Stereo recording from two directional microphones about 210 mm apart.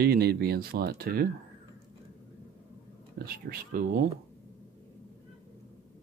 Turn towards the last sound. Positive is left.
turn(degrees=-40)  # may be behind; listen again after turning